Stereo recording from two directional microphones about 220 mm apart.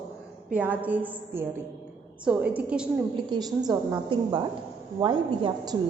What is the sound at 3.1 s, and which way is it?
A woman's voice, 20° right (ahead or behind).